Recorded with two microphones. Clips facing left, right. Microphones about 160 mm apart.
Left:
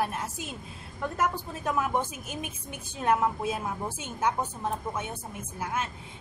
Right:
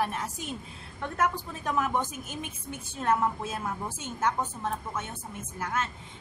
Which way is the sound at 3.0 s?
15° left (ahead or behind).